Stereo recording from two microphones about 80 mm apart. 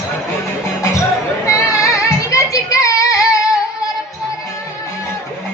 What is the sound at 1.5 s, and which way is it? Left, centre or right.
Child singing, left.